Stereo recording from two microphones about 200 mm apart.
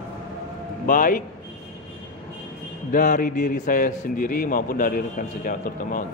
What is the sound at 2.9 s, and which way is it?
A man's voice, 45° left (ahead or behind).